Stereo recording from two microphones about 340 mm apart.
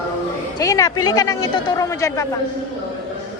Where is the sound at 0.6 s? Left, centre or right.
Centre.